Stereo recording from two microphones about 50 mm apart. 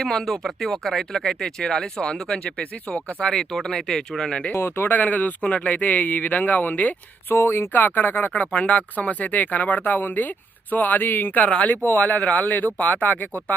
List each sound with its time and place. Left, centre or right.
0.0 s speech: centre
2.4 s speech: left
3.2 s speech: centre
4.5 s speech: left
4.9 s speech: left
7.3 s speech: left
8.3 s speech: left